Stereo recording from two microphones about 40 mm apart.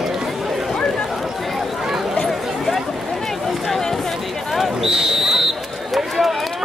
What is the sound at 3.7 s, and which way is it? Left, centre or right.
Run, centre.